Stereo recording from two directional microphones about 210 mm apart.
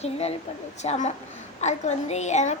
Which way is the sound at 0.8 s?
35° left (ahead or behind).